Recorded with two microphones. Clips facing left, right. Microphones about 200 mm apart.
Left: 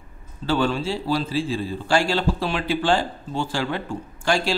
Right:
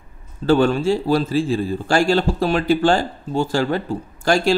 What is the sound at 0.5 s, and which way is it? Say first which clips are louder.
A man's voice: right 7 dB; 50° right (ahead or behind).